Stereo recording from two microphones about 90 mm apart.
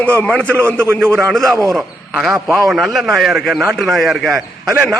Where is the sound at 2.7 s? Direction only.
Centre (ahead or behind).